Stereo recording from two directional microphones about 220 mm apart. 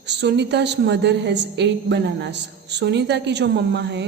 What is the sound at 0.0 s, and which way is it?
A woman's voice, 50° right (ahead or behind).